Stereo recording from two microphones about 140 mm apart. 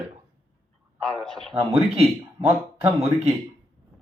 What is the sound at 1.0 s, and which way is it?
Speech, 5° left (ahead or behind).